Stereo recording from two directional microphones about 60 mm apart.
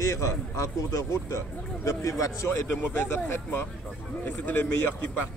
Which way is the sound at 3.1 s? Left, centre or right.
Left.